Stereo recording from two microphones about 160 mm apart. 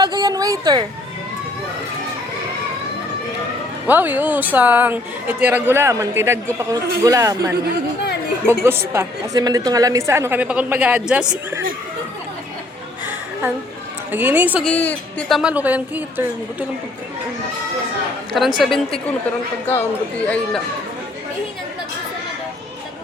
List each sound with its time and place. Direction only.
0.0 s speech: 25° right (ahead or behind)
3.8 s a man's voice: 10° right (ahead or behind)
8.9 s a man's voice: 20° right (ahead or behind)
14.1 s a man's voice: 10° right (ahead or behind)
14.6 s speech: 10° left (ahead or behind)
15.3 s a man's voice: 5° right (ahead or behind)
18.3 s a woman's voice: centre (ahead or behind)
19.6 s speech: 15° left (ahead or behind)